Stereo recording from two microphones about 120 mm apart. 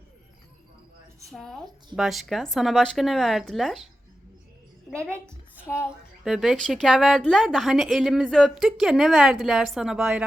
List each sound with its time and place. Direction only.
1.3 s a woman's voice: 5° left (ahead or behind)
5.0 s a woman's voice: 10° left (ahead or behind)
5.6 s a child's voice: 20° left (ahead or behind)
6.2 s a woman's voice: 5° right (ahead or behind)